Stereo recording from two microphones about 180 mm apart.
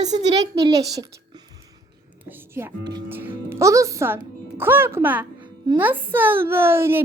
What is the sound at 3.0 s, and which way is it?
A woman's voice, 10° right (ahead or behind).